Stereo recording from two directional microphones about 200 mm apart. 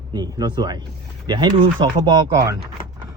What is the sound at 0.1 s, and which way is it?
Speech, 20° right (ahead or behind).